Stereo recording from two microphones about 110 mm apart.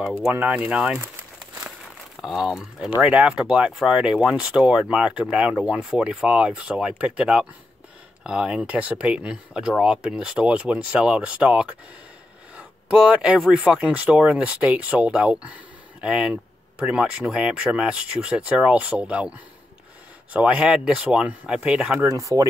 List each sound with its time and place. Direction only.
0.3 s speech: 15° right (ahead or behind)
2.2 s speech: 5° right (ahead or behind)
12.5 s a sound: 10° right (ahead or behind)
13.4 s speech: 5° right (ahead or behind)
20.3 s speech: 10° right (ahead or behind)
22.0 s speech: 30° right (ahead or behind)